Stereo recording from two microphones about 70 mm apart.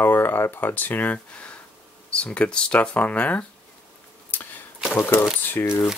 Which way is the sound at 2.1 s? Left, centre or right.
Centre.